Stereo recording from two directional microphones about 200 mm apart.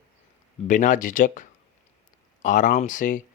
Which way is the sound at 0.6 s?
40° left (ahead or behind).